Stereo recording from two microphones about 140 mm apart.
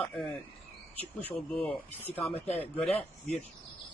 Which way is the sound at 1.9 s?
15° left (ahead or behind).